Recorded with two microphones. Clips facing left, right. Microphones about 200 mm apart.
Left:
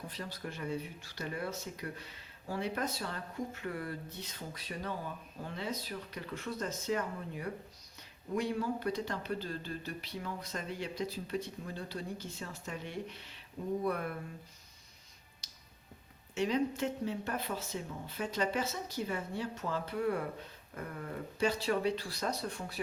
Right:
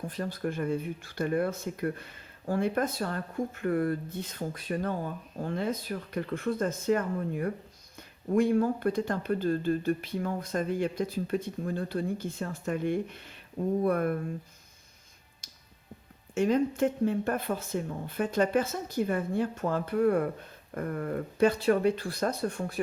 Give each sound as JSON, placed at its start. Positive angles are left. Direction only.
{"t": 0.1, "sound": "speech", "side_deg": -50}
{"t": 16.3, "sound": "speech", "side_deg": -50}